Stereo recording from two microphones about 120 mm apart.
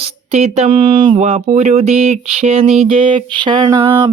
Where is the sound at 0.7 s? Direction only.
45° right (ahead or behind).